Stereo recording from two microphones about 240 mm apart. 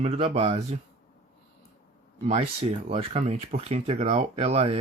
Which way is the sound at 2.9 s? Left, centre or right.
Right.